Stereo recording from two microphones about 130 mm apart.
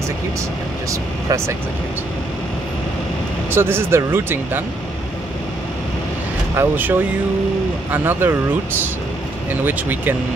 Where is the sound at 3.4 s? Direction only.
15° right (ahead or behind).